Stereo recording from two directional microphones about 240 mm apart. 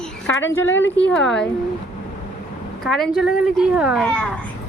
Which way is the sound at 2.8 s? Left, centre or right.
Centre.